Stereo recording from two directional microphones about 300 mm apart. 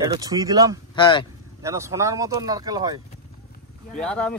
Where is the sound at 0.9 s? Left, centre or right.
Centre.